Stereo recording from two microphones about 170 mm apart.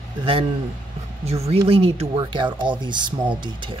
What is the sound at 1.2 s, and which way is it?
Speech, 35° right (ahead or behind).